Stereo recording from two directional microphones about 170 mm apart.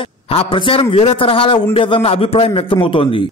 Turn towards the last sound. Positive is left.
turn(degrees=30)  # may be behind; listen again after turning